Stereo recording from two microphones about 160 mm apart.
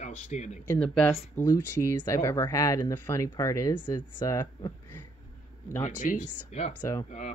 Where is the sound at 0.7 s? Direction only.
5° left (ahead or behind).